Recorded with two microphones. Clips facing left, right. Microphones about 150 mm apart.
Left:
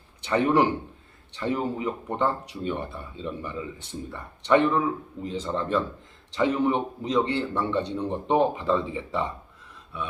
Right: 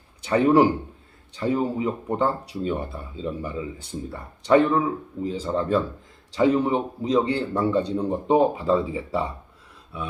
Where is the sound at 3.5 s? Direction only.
10° right (ahead or behind).